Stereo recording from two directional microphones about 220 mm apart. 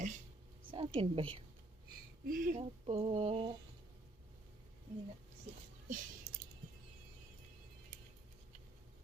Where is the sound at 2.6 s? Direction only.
25° right (ahead or behind).